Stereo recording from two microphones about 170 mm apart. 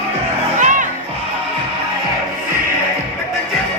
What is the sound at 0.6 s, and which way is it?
Music, 50° right (ahead or behind).